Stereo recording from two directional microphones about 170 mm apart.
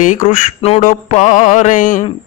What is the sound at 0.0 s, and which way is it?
Speech, 50° left (ahead or behind).